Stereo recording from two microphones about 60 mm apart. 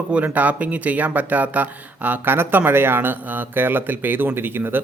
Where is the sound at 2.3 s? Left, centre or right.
Right.